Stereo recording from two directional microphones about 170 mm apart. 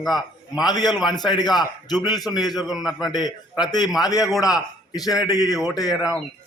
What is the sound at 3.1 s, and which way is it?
A man's voice, 25° left (ahead or behind).